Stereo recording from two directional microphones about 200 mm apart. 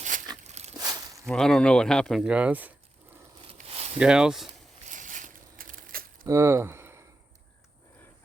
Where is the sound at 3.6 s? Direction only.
30° right (ahead or behind).